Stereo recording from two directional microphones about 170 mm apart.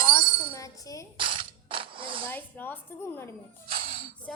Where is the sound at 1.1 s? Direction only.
30° right (ahead or behind).